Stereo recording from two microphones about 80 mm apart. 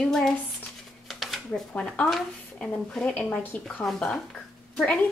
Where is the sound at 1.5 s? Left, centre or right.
Centre.